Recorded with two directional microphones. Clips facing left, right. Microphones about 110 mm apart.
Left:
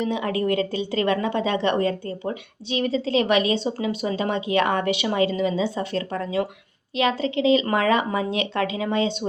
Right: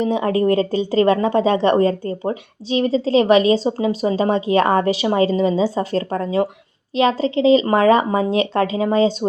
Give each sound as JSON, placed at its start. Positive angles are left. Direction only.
{"t": 0.0, "sound": "speech", "side_deg": -35}